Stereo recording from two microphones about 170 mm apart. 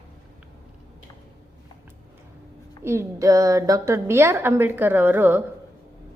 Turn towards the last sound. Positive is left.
turn(degrees=-10)  # may be behind; listen again after turning